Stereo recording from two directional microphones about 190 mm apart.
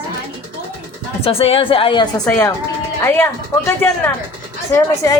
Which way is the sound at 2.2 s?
10° left (ahead or behind).